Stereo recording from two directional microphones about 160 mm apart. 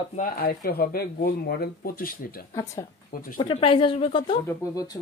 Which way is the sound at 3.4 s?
35° left (ahead or behind).